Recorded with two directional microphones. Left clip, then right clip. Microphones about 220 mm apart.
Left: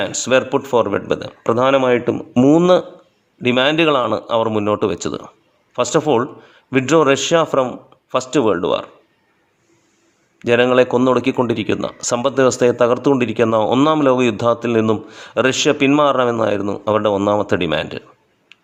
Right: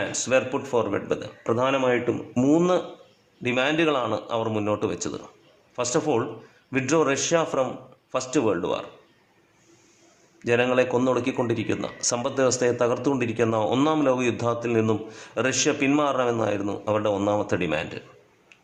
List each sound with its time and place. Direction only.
0.0 s speech: 45° left (ahead or behind)
10.4 s speech: 40° left (ahead or behind)